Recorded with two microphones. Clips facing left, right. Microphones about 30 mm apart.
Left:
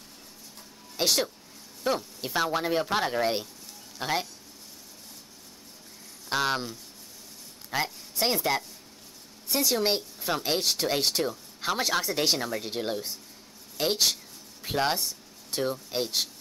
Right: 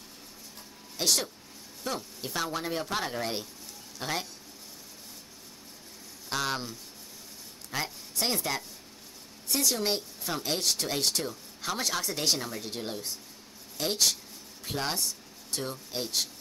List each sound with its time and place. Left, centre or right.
0.9 s speech: centre
6.2 s speech: centre
7.7 s speech: centre